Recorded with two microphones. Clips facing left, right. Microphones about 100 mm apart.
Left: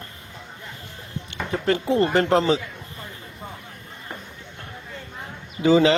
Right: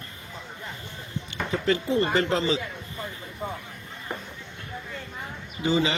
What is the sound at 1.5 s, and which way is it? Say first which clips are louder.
Speech: left 3 dB; 50° left (ahead or behind).